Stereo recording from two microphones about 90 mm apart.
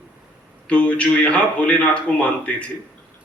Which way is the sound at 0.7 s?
15° left (ahead or behind).